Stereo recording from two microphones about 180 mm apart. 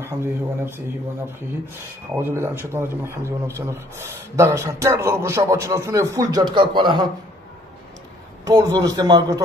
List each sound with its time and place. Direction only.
0.0 s speech: 15° right (ahead or behind)
2.1 s speech: 15° right (ahead or behind)
8.5 s a man's voice: 20° right (ahead or behind)